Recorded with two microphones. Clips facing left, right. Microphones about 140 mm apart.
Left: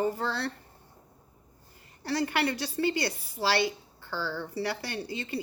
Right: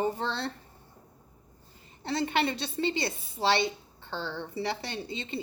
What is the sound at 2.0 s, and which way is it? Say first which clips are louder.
A woman's voice: even; 25° right (ahead or behind).